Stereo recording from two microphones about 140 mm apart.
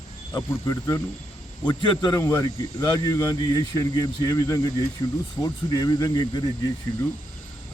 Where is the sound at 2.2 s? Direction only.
20° left (ahead or behind).